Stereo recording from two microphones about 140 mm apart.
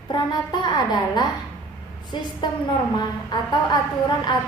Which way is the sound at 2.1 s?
35° left (ahead or behind).